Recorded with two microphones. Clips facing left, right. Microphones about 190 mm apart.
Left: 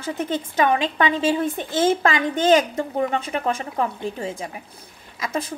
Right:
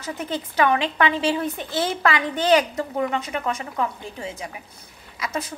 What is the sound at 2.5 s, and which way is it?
Speech, 30° left (ahead or behind).